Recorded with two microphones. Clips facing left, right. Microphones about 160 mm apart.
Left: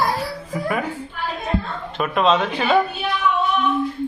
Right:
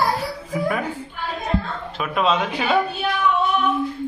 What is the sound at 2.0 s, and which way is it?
Speech, 5° right (ahead or behind).